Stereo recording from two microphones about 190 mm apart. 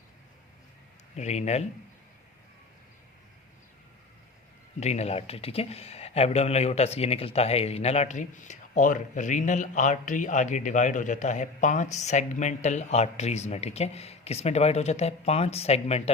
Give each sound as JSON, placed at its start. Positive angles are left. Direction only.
{"t": 1.1, "sound": "speech", "side_deg": 35}
{"t": 4.8, "sound": "speech", "side_deg": 35}